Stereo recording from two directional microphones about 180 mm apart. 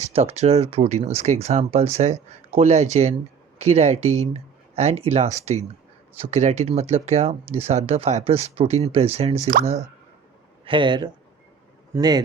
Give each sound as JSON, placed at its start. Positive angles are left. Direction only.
{"t": 0.0, "sound": "speech", "side_deg": -35}
{"t": 10.7, "sound": "speech", "side_deg": -25}